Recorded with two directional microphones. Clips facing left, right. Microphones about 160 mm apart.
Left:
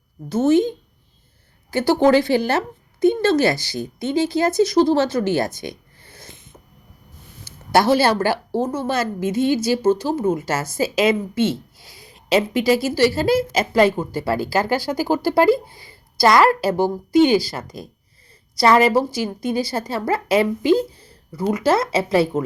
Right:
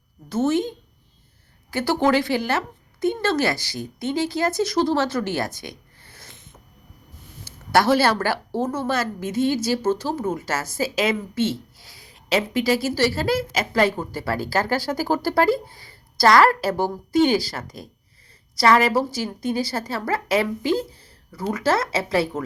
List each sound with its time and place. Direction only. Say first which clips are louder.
0.3 s speech: left 5 dB; 15° left (ahead or behind)
1.7 s a woman's voice: left 5 dB; 20° left (ahead or behind)
7.4 s a woman's voice: left 2 dB; 20° left (ahead or behind)